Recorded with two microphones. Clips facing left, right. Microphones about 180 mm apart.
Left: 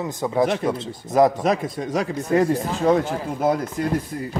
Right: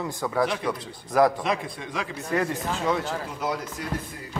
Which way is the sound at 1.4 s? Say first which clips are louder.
Left 6 dB; 45° left (ahead or behind).